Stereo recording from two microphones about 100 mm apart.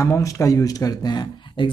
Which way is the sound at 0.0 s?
30° left (ahead or behind).